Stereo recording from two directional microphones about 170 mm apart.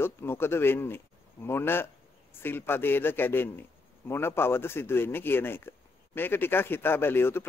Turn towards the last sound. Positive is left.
turn(degrees=15)  # may be behind; listen again after turning